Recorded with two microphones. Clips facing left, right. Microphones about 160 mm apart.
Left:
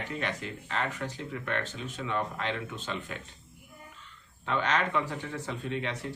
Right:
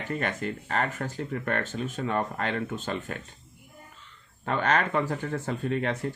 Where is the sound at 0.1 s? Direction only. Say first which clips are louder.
Right 8 dB; 50° right (ahead or behind).